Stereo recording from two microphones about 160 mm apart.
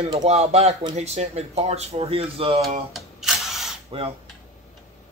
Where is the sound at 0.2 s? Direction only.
40° right (ahead or behind).